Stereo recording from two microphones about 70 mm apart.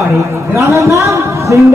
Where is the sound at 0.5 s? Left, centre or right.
Right.